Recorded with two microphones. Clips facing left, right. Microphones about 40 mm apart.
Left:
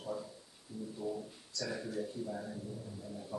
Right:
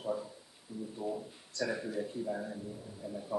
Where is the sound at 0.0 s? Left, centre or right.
Centre.